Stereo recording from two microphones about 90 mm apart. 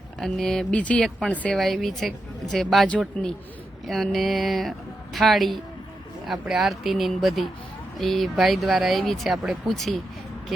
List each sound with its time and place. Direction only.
0.2 s speech: 5° left (ahead or behind)
1.5 s speech: centre (ahead or behind)